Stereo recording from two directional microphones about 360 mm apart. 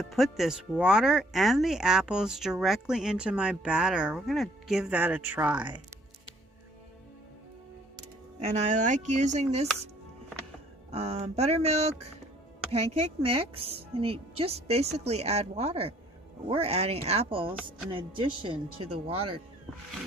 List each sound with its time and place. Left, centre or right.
0.0 s speech: centre
7.9 s music: centre
9.1 s speech: centre
10.9 s a woman's voice: centre